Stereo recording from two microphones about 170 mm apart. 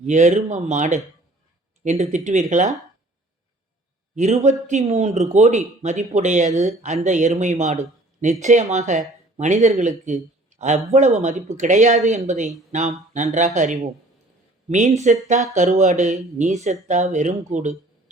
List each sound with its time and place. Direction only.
0.0 s speech: 45° right (ahead or behind)
4.1 s speech: 40° right (ahead or behind)
10.9 s speech: 40° right (ahead or behind)